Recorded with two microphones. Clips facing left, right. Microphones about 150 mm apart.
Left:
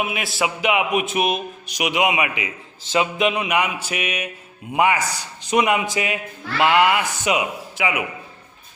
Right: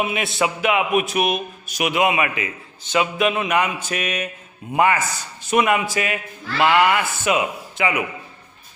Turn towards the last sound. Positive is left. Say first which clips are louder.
# right 1 dB
turn(degrees=10)  # may be behind; listen again after turning